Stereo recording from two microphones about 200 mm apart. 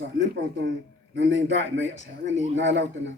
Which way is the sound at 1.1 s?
70° right (ahead or behind).